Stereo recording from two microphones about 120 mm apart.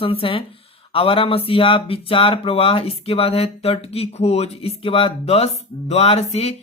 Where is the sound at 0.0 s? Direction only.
50° left (ahead or behind).